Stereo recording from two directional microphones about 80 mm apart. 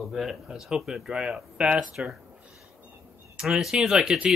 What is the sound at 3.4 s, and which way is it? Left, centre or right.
Speech, centre.